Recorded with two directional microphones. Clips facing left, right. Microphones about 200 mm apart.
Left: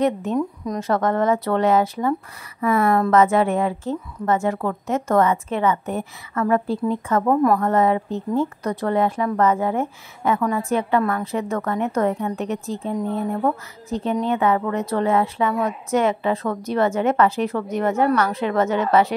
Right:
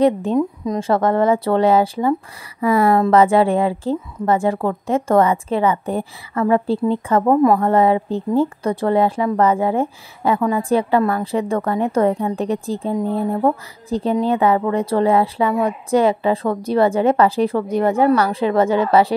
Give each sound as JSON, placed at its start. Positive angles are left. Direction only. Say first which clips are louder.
{"t": 0.0, "sound": "a woman's voice", "louder": "right 5 dB", "side_deg": -30}